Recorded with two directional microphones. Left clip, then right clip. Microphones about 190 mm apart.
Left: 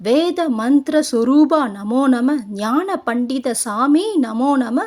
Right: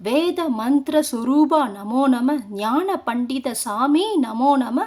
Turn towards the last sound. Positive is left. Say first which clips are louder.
# even
turn(degrees=15)  # may be behind; listen again after turning